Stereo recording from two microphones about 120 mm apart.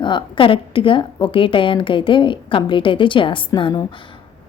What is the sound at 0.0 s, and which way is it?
A woman's voice, 40° left (ahead or behind).